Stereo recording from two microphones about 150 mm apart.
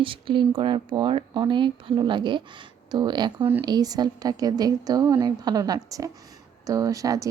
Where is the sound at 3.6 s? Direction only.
25° right (ahead or behind).